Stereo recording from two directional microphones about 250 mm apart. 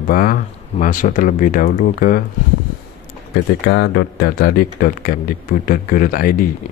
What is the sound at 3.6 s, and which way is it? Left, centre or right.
Speech, left.